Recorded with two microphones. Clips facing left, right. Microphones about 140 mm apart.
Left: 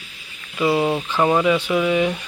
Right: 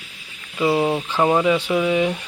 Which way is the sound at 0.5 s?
10° right (ahead or behind).